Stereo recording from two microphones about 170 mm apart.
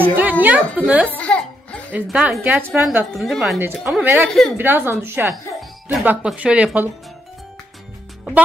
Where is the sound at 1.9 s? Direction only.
5° right (ahead or behind).